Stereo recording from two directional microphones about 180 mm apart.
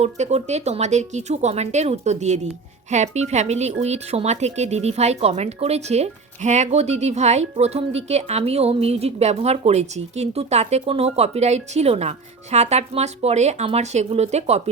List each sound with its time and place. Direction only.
0.0 s speech: 35° right (ahead or behind)